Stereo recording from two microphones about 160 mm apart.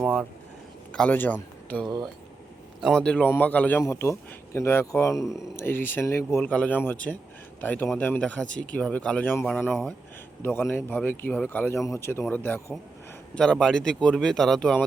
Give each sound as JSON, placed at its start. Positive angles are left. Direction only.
{"t": 0.0, "sound": "speech", "side_deg": -5}
{"t": 0.9, "sound": "speech", "side_deg": 10}
{"t": 9.6, "sound": "speech", "side_deg": -5}
{"t": 10.4, "sound": "speech", "side_deg": 15}